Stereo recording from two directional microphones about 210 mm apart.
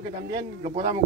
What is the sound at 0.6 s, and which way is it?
Speech, 30° right (ahead or behind).